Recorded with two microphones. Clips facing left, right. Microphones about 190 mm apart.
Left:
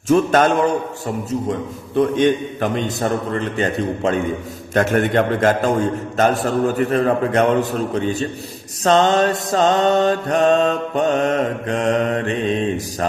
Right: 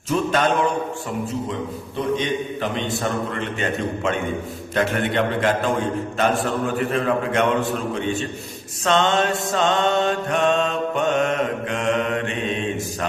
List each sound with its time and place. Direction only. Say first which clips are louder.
0.1 s a man's voice: left 7 dB; 45° left (ahead or behind)
2.1 s mantra: left 7 dB; 50° left (ahead or behind); by 4.2 s 35° left (ahead or behind)
4.7 s a man's voice: left 5 dB; 45° left (ahead or behind)
6.1 s mantra: left 5 dB; 40° left (ahead or behind)